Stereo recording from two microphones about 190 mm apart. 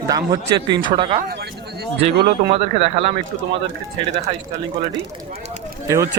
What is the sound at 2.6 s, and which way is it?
Speech, 30° right (ahead or behind).